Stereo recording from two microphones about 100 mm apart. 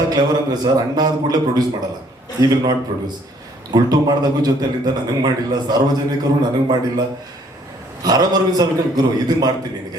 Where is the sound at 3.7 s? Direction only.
45° right (ahead or behind).